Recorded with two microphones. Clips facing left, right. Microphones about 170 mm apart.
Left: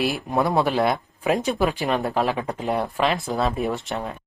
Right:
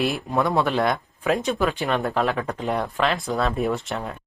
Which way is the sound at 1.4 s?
35° left (ahead or behind).